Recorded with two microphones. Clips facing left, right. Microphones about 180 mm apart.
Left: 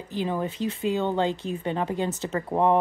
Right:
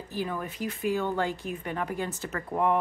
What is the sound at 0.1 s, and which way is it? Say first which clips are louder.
Speech: left 5 dB; 25° left (ahead or behind).